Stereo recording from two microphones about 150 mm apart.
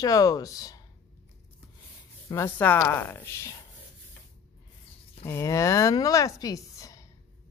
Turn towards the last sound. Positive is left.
turn(degrees=20)  # may be behind; listen again after turning